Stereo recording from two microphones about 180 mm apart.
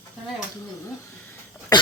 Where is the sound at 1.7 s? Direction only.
20° left (ahead or behind).